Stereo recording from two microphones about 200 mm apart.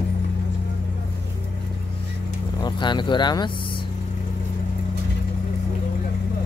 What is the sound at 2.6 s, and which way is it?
Speech, 20° left (ahead or behind).